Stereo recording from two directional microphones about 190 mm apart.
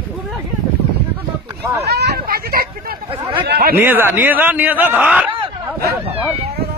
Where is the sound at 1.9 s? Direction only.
60° right (ahead or behind).